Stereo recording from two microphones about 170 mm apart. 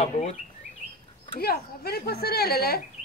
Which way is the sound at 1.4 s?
65° left (ahead or behind).